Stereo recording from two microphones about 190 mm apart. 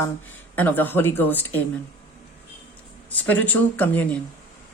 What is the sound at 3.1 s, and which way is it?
A woman's voice, 10° left (ahead or behind).